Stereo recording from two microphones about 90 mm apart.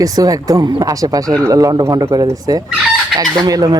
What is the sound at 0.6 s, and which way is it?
Speech, 50° right (ahead or behind).